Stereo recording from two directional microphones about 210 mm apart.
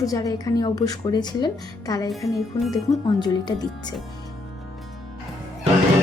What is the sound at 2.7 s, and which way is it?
Speech, 20° left (ahead or behind).